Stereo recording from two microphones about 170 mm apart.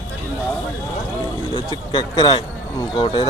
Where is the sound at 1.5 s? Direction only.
30° left (ahead or behind).